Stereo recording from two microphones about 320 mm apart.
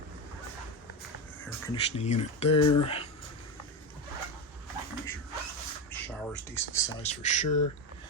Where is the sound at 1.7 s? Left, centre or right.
Centre.